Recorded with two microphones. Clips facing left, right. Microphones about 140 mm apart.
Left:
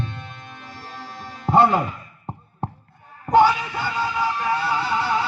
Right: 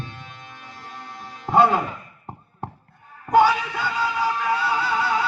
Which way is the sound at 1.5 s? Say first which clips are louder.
Left 1 dB; 5° left (ahead or behind).